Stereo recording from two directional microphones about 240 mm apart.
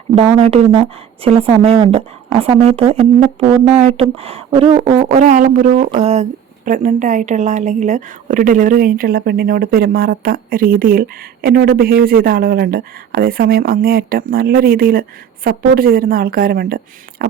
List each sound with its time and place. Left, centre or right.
0.2 s a woman's voice: right